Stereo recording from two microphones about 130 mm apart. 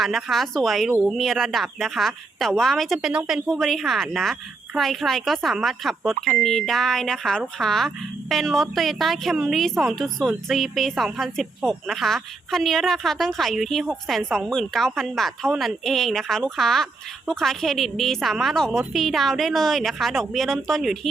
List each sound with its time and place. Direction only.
0.0 s speech: centre (ahead or behind)